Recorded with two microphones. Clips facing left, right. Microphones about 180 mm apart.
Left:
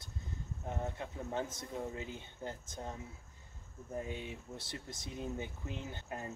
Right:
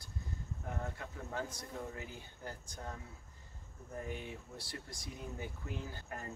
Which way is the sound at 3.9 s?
20° left (ahead or behind).